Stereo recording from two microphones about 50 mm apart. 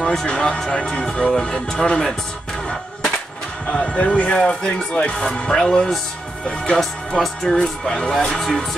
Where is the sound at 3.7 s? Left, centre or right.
Centre.